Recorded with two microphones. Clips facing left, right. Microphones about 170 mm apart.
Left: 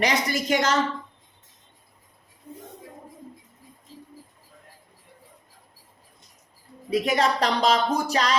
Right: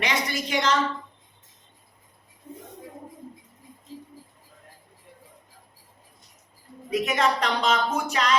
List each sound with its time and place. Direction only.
0.0 s a woman's voice: 40° left (ahead or behind)
6.9 s speech: 35° left (ahead or behind)